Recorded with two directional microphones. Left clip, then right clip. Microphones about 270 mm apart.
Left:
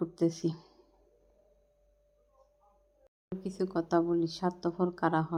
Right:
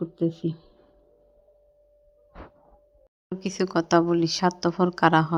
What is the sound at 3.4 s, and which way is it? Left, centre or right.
A woman's voice, centre.